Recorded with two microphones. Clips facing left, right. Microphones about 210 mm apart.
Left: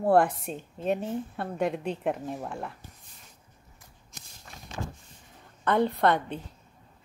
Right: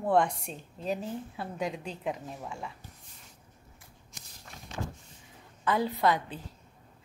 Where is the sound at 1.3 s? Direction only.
60° left (ahead or behind).